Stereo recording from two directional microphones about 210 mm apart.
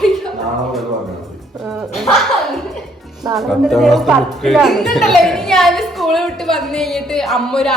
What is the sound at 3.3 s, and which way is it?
Speech, centre (ahead or behind).